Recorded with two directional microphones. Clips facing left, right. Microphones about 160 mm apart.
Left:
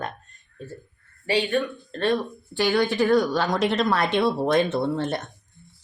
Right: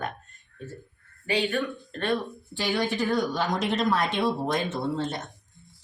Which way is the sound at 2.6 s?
85° left.